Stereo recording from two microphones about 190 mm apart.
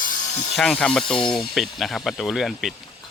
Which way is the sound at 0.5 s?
5° left (ahead or behind).